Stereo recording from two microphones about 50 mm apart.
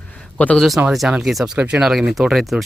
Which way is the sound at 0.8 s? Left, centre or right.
Right.